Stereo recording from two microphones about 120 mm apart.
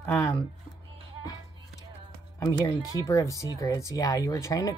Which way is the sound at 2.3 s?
25° left (ahead or behind).